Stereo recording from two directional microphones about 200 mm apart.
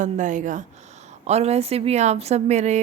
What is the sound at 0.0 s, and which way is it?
Speech, 40° right (ahead or behind).